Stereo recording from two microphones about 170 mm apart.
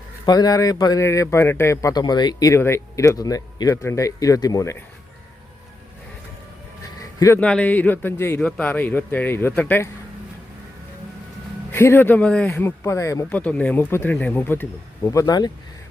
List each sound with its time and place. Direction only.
0.3 s a man's voice: 20° left (ahead or behind)
7.3 s speech: 5° left (ahead or behind)
11.7 s speech: 15° left (ahead or behind)